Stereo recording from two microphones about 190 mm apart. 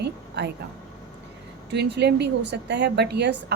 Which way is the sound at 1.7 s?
60° right (ahead or behind).